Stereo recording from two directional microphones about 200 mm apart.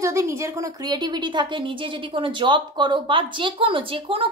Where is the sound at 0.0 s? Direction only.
15° right (ahead or behind).